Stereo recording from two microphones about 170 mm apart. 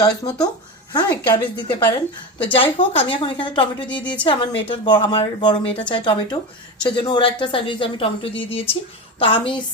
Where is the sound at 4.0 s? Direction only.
10° left (ahead or behind).